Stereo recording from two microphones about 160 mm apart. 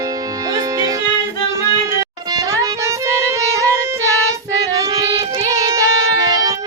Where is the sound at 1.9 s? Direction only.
20° right (ahead or behind).